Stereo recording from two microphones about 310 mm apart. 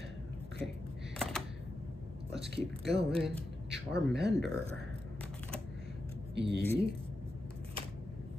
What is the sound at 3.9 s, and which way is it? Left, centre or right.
Speech, right.